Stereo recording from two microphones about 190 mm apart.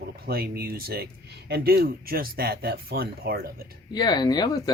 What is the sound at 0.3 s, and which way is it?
Speech, 55° right (ahead or behind).